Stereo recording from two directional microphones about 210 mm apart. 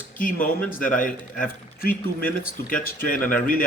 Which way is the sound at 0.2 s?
40° left (ahead or behind).